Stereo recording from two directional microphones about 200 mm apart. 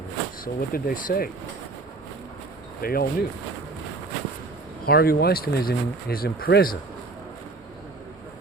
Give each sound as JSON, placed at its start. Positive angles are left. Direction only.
{"t": 0.4, "sound": "speech", "side_deg": 45}
{"t": 2.8, "sound": "speech", "side_deg": 50}
{"t": 4.9, "sound": "speech", "side_deg": 50}